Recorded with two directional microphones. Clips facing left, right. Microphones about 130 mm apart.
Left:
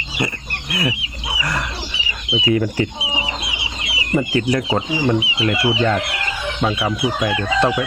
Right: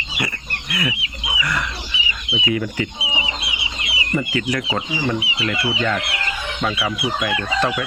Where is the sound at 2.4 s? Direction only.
35° left (ahead or behind).